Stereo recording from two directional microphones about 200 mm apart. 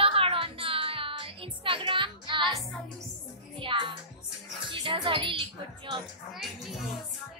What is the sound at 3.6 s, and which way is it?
A woman's voice, 25° right (ahead or behind).